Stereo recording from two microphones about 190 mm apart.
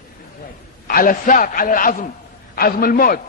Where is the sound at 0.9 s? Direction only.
50° left (ahead or behind).